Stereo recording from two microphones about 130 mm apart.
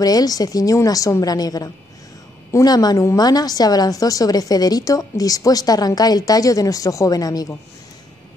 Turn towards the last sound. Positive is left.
turn(degrees=30)  # may be behind; listen again after turning